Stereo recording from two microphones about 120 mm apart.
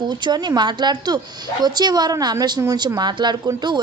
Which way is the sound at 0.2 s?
35° right (ahead or behind).